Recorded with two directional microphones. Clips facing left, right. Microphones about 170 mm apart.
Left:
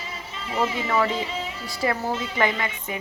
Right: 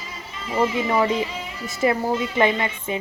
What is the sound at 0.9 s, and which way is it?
A woman's voice, 20° right (ahead or behind).